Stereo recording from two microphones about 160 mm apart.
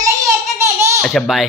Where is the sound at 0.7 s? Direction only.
20° right (ahead or behind).